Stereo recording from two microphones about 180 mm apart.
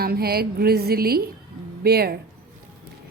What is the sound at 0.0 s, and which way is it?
A woman's voice, 60° right (ahead or behind).